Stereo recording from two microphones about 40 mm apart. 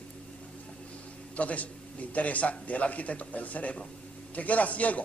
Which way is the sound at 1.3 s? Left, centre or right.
Left.